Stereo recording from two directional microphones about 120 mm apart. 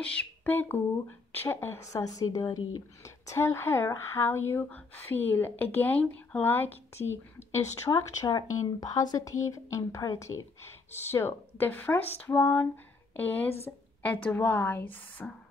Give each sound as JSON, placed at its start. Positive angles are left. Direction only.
{"t": 0.0, "sound": "speech", "side_deg": 10}